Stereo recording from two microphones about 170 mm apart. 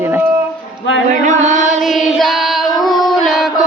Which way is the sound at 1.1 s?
45° right (ahead or behind).